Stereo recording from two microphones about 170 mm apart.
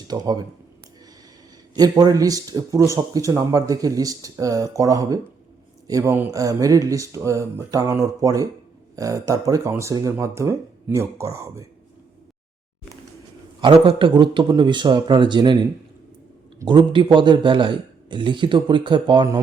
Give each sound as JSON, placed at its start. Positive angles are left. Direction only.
{"t": 0.1, "sound": "speech", "side_deg": -25}
{"t": 1.7, "sound": "speech", "side_deg": -25}
{"t": 13.6, "sound": "speech", "side_deg": -30}
{"t": 16.6, "sound": "speech", "side_deg": -30}